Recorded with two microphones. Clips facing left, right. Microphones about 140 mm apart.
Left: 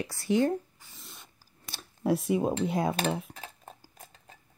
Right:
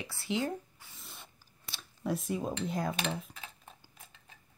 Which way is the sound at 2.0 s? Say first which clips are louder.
Left 7 dB; 70° left (ahead or behind).